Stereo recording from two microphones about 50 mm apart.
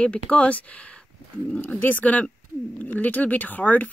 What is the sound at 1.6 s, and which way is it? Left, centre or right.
Speech, left.